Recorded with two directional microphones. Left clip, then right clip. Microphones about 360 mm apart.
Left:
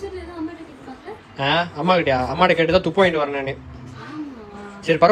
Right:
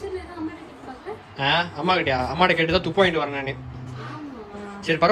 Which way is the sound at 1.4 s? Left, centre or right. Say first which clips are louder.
Left 2 dB; centre.